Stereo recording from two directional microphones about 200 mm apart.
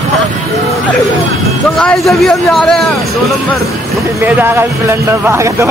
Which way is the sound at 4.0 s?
10° right (ahead or behind).